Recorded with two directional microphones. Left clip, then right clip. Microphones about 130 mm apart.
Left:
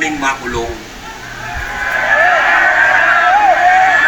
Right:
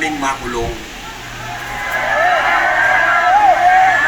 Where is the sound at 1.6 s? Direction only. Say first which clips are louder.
Left 4 dB; 15° left (ahead or behind).